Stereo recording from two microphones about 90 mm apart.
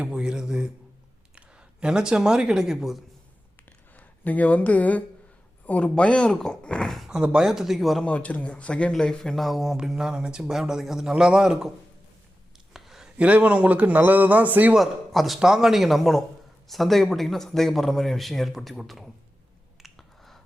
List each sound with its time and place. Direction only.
0.0 s a sound: 10° right (ahead or behind)
1.4 s speech: 10° right (ahead or behind)
3.7 s a sound: 20° left (ahead or behind)
5.6 s a man's voice: 15° left (ahead or behind)
8.0 s a man's voice: 15° left (ahead or behind); by 11.7 s 5° right (ahead or behind)
12.7 s a sound: 5° right (ahead or behind)
13.1 s a man's voice: 15° right (ahead or behind)
14.8 s a man's voice: centre (ahead or behind)
19.8 s finger snapping: centre (ahead or behind)